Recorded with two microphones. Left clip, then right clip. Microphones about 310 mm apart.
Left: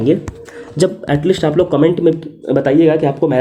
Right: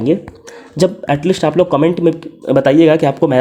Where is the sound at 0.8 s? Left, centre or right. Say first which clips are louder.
Right 1 dB; centre.